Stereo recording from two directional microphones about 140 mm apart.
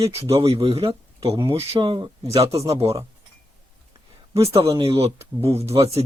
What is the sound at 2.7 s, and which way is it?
Speech, 45° right (ahead or behind).